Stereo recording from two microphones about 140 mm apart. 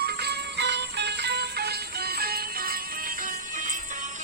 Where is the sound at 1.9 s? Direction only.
90° right.